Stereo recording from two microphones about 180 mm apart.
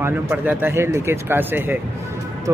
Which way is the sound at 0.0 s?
10° right (ahead or behind).